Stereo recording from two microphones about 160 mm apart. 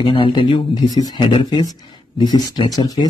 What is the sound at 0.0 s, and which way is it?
Speech, 30° left (ahead or behind).